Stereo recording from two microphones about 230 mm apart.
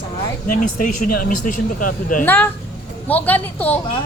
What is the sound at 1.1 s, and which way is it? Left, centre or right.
Speech, left.